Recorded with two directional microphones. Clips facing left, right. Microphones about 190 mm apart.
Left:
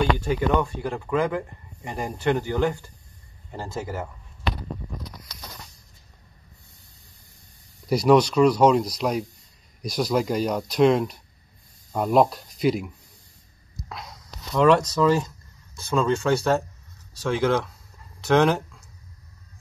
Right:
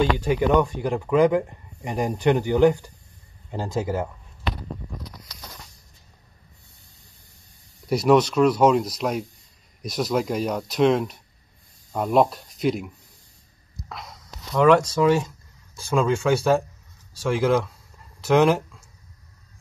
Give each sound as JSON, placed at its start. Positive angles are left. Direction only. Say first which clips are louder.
{"t": 0.2, "sound": "speech", "louder": "right 3 dB", "side_deg": -15}
{"t": 7.9, "sound": "speech", "louder": "even", "side_deg": 0}
{"t": 13.8, "sound": "a sound", "louder": "even", "side_deg": 0}
{"t": 15.0, "sound": "speech", "louder": "right 1 dB", "side_deg": -5}